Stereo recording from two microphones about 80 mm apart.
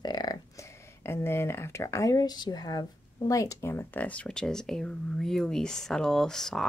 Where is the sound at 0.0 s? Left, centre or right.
Left.